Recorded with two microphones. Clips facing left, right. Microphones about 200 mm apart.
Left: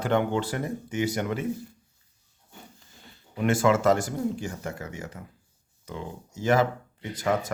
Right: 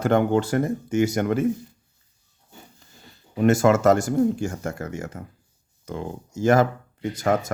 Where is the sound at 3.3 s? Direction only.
45° right (ahead or behind).